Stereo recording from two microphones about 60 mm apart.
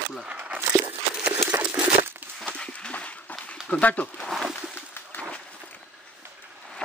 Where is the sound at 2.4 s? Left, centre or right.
Centre.